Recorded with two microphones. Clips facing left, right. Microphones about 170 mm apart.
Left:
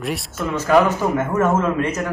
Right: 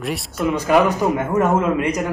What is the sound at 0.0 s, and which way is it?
Speech, centre (ahead or behind).